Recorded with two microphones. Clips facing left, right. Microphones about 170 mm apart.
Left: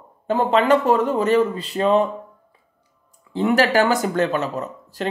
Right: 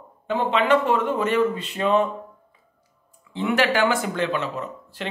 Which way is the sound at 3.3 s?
40° left (ahead or behind).